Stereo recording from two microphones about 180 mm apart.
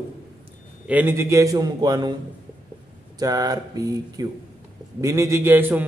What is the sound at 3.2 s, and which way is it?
A man's voice, 20° right (ahead or behind).